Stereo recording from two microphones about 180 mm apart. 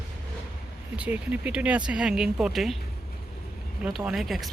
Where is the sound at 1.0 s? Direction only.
10° right (ahead or behind).